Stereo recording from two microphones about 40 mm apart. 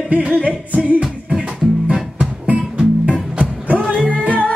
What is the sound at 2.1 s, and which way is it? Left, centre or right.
Music, right.